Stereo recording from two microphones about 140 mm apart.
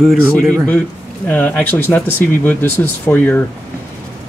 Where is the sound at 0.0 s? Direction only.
5° left (ahead or behind).